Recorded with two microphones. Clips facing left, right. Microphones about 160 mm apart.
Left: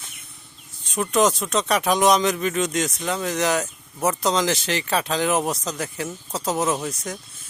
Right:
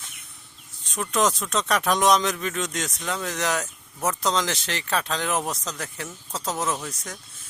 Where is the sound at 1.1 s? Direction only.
Centre (ahead or behind).